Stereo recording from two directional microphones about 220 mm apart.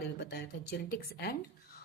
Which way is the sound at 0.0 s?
45° left (ahead or behind).